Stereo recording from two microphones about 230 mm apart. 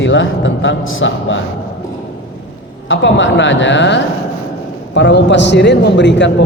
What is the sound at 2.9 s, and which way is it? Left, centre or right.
A man's voice, left.